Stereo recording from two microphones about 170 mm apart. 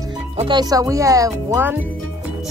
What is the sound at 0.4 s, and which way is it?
Speech, 25° right (ahead or behind).